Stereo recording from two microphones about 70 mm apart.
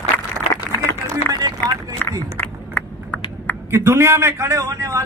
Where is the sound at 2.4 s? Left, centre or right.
Left.